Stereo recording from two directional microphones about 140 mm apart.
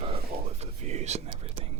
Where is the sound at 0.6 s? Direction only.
50° right (ahead or behind).